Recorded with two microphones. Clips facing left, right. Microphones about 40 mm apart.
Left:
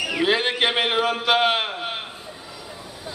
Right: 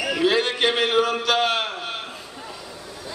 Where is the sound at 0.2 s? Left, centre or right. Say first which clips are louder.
Even; left.